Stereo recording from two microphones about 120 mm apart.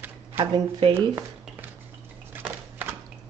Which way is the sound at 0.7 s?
45° right (ahead or behind).